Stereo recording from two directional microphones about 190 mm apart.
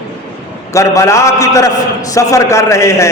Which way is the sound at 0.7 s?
15° left (ahead or behind).